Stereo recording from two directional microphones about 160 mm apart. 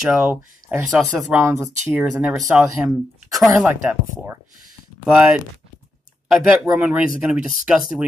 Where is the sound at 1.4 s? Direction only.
15° right (ahead or behind).